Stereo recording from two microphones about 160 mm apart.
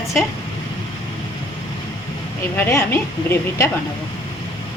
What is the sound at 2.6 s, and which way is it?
Speech, 15° left (ahead or behind).